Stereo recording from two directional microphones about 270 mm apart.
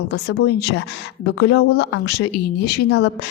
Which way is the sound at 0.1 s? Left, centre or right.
Left.